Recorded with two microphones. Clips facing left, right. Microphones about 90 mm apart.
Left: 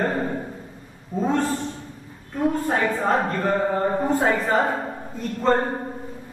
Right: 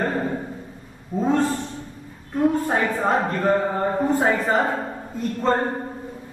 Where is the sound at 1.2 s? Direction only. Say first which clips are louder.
Right 2 dB; centre (ahead or behind).